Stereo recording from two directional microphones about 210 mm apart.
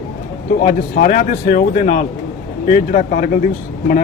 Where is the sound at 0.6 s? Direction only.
40° left (ahead or behind).